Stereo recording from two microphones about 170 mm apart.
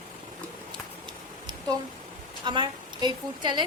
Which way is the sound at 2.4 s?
25° right (ahead or behind).